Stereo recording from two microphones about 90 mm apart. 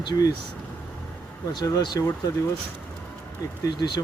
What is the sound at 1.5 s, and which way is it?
Speech, 50° left (ahead or behind).